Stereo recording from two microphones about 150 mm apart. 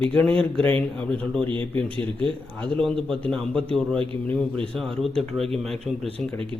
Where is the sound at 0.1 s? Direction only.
5° left (ahead or behind).